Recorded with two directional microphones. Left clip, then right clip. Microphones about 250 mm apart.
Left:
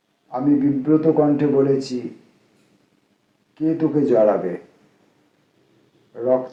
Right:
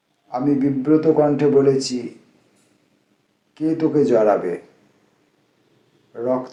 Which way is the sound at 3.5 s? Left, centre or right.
Right.